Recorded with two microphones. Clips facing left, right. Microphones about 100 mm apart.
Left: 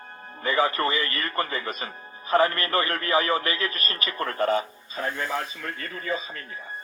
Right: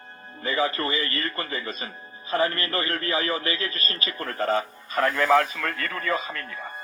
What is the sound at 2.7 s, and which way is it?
Speech, 30° left (ahead or behind).